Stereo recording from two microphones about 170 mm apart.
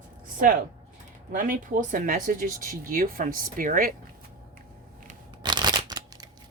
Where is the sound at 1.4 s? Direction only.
50° right (ahead or behind).